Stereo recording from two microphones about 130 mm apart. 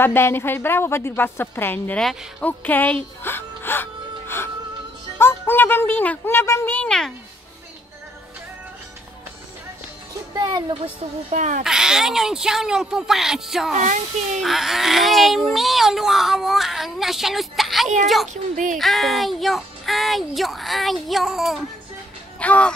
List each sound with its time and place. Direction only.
0.0 s a woman's voice: 15° left (ahead or behind)
10.3 s speech: 30° right (ahead or behind)
11.2 s a child's voice: 75° right (ahead or behind)
11.6 s speech: 5° right (ahead or behind)
13.8 s a child's voice: 75° right (ahead or behind)
14.4 s speech: centre (ahead or behind)
18.3 s speech: 85° right
18.8 s speech: centre (ahead or behind)
22.4 s speech: 10° left (ahead or behind)